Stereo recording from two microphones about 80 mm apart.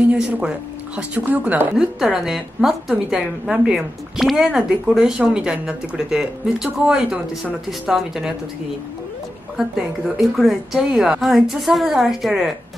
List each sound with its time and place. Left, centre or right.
0.1 s speech: centre
1.8 s a woman's voice: centre
9.6 s a woman's voice: centre